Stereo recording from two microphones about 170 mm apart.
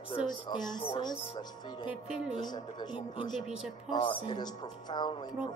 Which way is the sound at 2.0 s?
5° right (ahead or behind).